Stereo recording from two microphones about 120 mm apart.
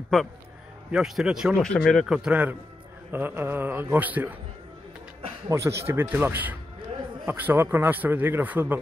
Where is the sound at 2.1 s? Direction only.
10° right (ahead or behind).